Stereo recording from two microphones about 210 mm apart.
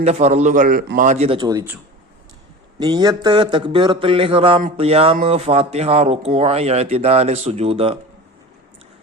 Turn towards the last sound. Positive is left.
turn(degrees=-25)  # may be behind; listen again after turning